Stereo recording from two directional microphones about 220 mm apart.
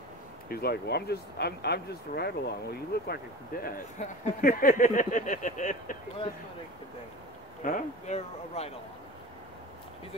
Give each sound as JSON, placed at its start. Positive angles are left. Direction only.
{"t": 0.5, "sound": "speech", "side_deg": 45}
{"t": 7.6, "sound": "speech", "side_deg": 35}